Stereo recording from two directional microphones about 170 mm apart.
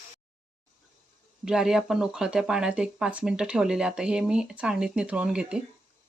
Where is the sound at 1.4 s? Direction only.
5° right (ahead or behind).